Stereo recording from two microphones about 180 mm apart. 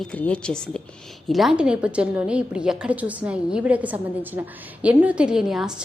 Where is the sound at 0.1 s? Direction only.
5° left (ahead or behind).